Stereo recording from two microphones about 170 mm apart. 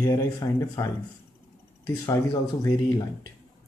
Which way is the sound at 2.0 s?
20° left (ahead or behind).